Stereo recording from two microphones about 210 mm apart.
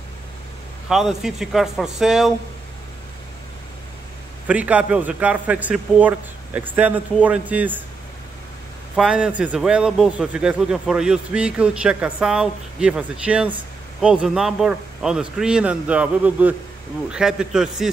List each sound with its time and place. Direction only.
0.8 s a man's voice: centre (ahead or behind)
4.5 s a man's voice: 5° right (ahead or behind)
8.9 s a man's voice: 5° right (ahead or behind)